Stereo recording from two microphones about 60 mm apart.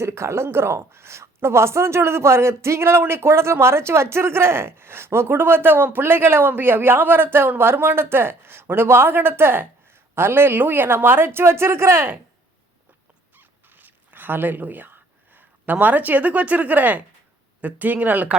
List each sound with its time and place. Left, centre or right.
0.0 s a woman's voice: right
13.3 s zipper: right
17.6 s speech: right